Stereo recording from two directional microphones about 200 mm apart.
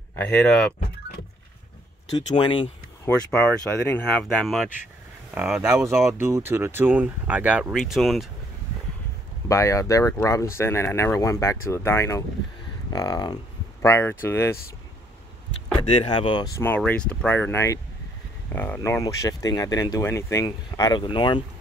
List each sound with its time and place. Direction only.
0.1 s speech: 5° left (ahead or behind)
2.1 s speech: 25° left (ahead or behind)
3.1 s speech: 5° left (ahead or behind)
9.5 s speech: 15° left (ahead or behind)
15.9 s speech: 25° left (ahead or behind)